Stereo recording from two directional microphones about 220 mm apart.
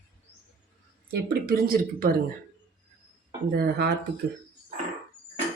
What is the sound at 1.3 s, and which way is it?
Speech, 40° right (ahead or behind).